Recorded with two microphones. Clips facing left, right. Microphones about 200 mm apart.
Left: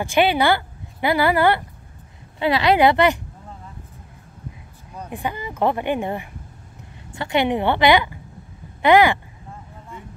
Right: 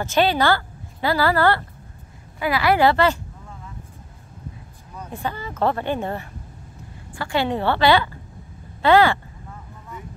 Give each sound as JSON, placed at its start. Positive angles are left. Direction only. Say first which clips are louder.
{"t": 0.0, "sound": "a woman's voice", "louder": "left 1 dB", "side_deg": 15}
{"t": 5.1, "sound": "speech", "louder": "left 1 dB", "side_deg": 15}